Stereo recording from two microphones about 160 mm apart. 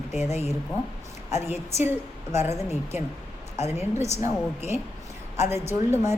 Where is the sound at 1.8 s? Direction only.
15° right (ahead or behind).